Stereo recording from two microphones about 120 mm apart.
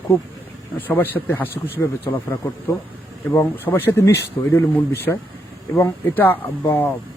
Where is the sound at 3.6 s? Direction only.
20° left (ahead or behind).